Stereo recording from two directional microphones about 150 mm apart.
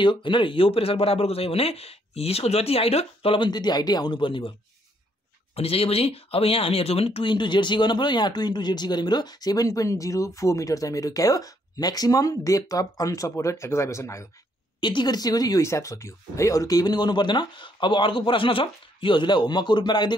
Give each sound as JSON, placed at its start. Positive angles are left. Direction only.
{"t": 0.0, "sound": "speech", "side_deg": 30}
{"t": 5.6, "sound": "speech", "side_deg": 40}
{"t": 14.8, "sound": "speech", "side_deg": 30}